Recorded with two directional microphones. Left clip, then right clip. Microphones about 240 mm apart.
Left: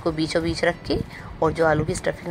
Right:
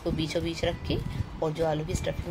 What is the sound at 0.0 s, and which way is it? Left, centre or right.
A woman's voice, centre.